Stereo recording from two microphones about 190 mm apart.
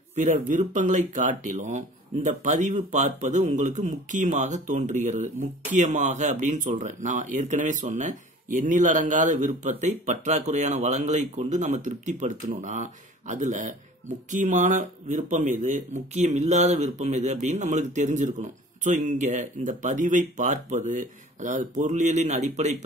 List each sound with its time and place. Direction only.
0.1 s speech: 40° right (ahead or behind)